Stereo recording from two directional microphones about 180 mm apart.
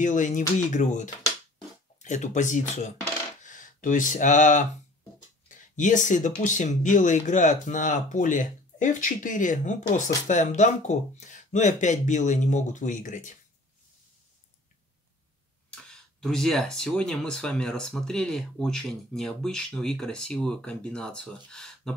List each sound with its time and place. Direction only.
0.0 s speech: 45° left (ahead or behind)
15.7 s speech: 5° left (ahead or behind)